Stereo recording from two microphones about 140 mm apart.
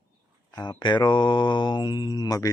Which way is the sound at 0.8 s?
30° left (ahead or behind).